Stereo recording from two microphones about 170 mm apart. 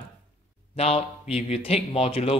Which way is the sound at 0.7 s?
35° left (ahead or behind).